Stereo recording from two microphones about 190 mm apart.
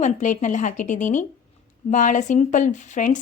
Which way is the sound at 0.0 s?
40° left (ahead or behind).